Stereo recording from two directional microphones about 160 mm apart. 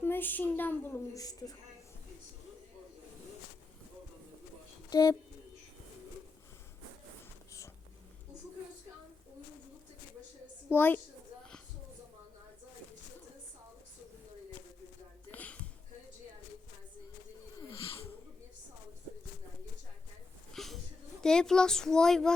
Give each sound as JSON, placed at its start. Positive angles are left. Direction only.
{"t": 0.0, "sound": "a woman's voice", "side_deg": 10}
{"t": 4.9, "sound": "speech", "side_deg": 25}
{"t": 10.7, "sound": "a woman's voice", "side_deg": 10}
{"t": 15.3, "sound": "a sound", "side_deg": 10}
{"t": 17.6, "sound": "wheeze", "side_deg": 20}
{"t": 20.5, "sound": "a sound", "side_deg": 0}
{"t": 21.2, "sound": "speech", "side_deg": 5}